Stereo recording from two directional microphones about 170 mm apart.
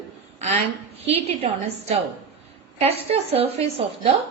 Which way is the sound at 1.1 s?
40° right (ahead or behind).